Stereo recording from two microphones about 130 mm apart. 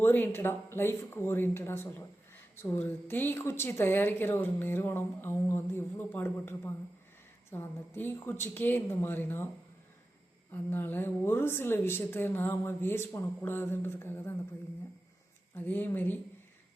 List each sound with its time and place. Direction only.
0.0 s a woman's voice: 15° left (ahead or behind)
10.5 s a woman's voice: 15° left (ahead or behind)
15.5 s a woman's voice: 15° left (ahead or behind)